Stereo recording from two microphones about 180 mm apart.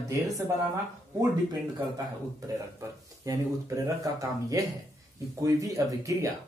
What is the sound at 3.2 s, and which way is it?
Speech, 20° right (ahead or behind).